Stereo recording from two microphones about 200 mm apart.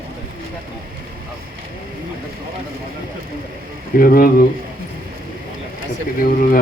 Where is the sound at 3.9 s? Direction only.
45° left (ahead or behind).